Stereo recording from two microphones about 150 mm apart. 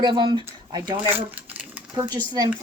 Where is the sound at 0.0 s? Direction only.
30° right (ahead or behind).